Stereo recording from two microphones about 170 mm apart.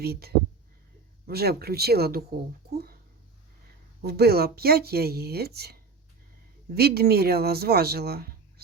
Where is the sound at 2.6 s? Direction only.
65° right (ahead or behind).